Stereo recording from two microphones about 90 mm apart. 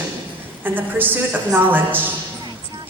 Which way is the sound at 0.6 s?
20° right (ahead or behind).